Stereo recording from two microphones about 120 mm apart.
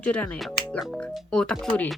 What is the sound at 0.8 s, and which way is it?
Speech, centre (ahead or behind).